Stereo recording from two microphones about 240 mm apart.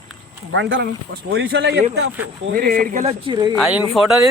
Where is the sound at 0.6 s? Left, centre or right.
Right.